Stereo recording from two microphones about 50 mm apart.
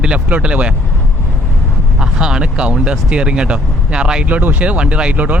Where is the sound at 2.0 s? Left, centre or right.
Centre.